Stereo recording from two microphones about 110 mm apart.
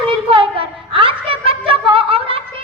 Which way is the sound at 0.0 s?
55° right (ahead or behind).